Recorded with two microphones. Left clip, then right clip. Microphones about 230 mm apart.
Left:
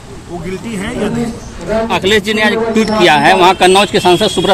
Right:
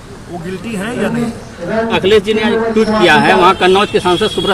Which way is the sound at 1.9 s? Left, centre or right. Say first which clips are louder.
Right 3 dB; left.